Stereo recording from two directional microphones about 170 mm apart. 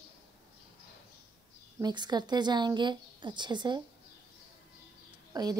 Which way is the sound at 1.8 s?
25° right (ahead or behind).